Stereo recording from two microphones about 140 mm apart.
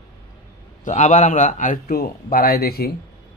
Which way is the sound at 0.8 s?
60° left (ahead or behind).